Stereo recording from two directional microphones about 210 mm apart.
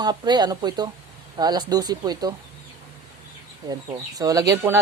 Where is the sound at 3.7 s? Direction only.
20° right (ahead or behind).